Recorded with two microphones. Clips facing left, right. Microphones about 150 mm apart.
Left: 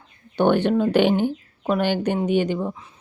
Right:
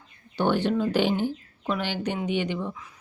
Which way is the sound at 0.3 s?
60° left (ahead or behind).